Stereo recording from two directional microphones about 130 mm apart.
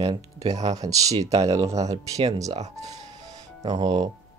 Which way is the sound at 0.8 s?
25° right (ahead or behind).